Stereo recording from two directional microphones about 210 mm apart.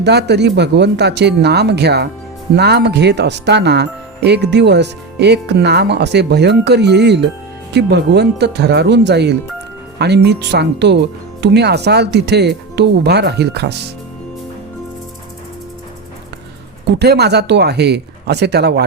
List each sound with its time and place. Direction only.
0.0 s speech: 50° right (ahead or behind)
16.8 s speech: 50° right (ahead or behind)